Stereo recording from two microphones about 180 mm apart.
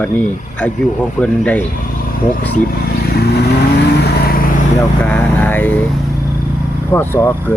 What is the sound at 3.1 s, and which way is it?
Vehicle, 60° left (ahead or behind).